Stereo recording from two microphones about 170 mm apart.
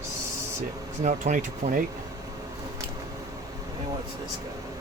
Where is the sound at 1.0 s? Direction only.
45° right (ahead or behind).